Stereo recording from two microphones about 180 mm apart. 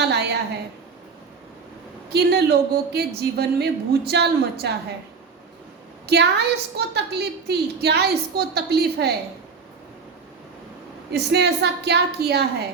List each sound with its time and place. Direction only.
0.0 s a sound: 70° right (ahead or behind)
2.1 s a woman's voice: 65° right (ahead or behind)
6.1 s a woman's voice: 65° right (ahead or behind)
11.1 s a woman's voice: 70° right (ahead or behind)